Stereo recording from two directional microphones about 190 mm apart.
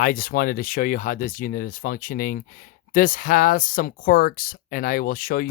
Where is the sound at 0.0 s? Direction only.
50° left (ahead or behind).